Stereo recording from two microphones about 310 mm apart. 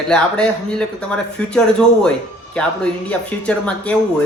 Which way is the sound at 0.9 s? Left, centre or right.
Centre.